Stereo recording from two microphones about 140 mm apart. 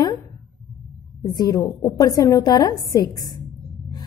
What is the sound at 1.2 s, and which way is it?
A woman's voice, 30° left (ahead or behind).